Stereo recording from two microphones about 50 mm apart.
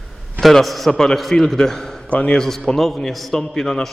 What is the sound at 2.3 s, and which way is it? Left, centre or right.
A man's voice, centre.